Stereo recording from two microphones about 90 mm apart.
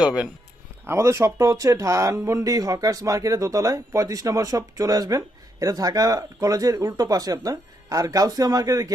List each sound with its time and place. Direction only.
0.0 s speech: 10° right (ahead or behind)
0.9 s speech: 30° right (ahead or behind)